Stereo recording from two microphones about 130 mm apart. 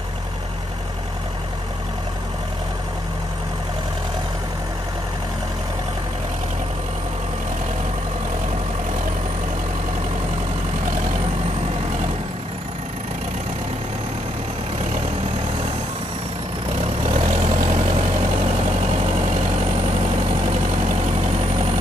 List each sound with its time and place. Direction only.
17.1 s vehicle: 70° right (ahead or behind)